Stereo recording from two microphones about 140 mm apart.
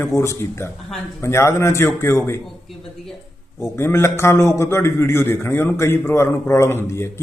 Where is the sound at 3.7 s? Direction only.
20° left (ahead or behind).